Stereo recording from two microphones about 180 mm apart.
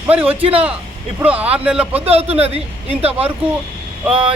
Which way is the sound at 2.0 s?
35° right (ahead or behind).